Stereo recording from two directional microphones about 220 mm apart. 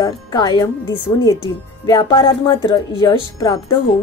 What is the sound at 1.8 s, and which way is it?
A woman's voice, 15° left (ahead or behind).